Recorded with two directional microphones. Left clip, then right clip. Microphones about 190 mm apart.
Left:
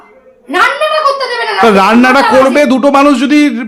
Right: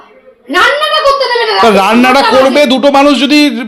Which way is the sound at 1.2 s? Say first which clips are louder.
Right 3 dB; 15° left (ahead or behind).